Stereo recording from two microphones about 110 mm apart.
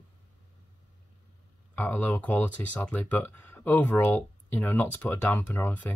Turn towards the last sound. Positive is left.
turn(degrees=15)  # may be behind; listen again after turning